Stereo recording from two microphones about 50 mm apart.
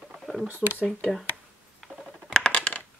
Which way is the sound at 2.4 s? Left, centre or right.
Left.